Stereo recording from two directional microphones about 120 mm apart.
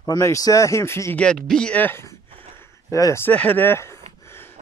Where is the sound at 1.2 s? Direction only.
5° left (ahead or behind); by 3.2 s 30° left (ahead or behind).